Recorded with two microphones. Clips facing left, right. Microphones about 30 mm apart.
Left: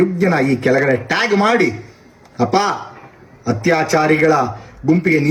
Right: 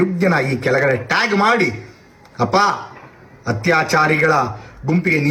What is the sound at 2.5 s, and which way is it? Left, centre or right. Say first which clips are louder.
Speech: right 2 dB; right.